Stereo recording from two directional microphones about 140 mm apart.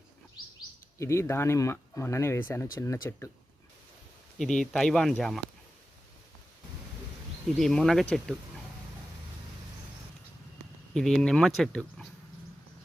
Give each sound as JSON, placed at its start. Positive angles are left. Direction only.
{"t": 0.9, "sound": "speech", "side_deg": 20}
{"t": 4.4, "sound": "speech", "side_deg": 5}
{"t": 7.6, "sound": "speech", "side_deg": 0}
{"t": 10.9, "sound": "speech", "side_deg": 5}